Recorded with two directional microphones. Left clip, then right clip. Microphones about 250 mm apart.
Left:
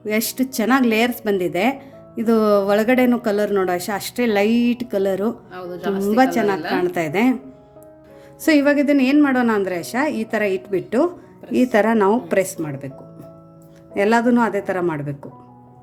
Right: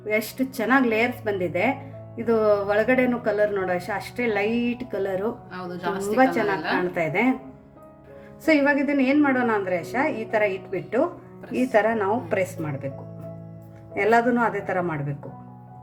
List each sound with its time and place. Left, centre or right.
0.1 s speech: left
5.5 s a woman's voice: centre
6.9 s speech: left
8.4 s speech: left
13.9 s speech: left